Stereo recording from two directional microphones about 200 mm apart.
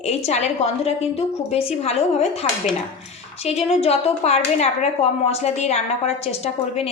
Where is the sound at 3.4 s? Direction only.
30° left (ahead or behind).